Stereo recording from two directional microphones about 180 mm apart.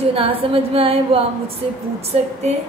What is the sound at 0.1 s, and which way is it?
A woman's voice, 30° right (ahead or behind).